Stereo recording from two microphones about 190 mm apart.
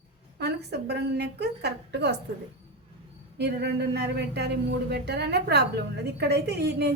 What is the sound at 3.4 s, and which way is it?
A woman's voice, 60° right (ahead or behind).